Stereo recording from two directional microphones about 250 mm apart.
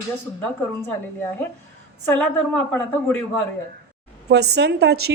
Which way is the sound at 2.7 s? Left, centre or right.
Centre.